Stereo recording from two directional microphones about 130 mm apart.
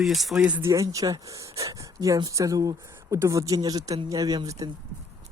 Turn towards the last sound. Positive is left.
turn(degrees=-30)  # may be behind; listen again after turning